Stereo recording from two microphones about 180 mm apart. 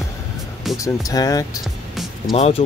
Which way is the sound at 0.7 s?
20° left (ahead or behind).